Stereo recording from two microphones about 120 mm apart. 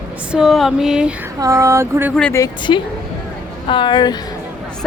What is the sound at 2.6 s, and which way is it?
A woman's voice, 40° left (ahead or behind).